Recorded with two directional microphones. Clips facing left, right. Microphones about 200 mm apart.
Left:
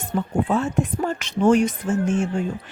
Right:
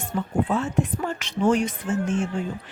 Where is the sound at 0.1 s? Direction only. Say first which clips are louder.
Left 3 dB; 35° left (ahead or behind).